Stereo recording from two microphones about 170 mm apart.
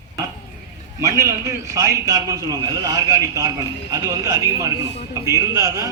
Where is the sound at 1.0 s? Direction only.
20° right (ahead or behind).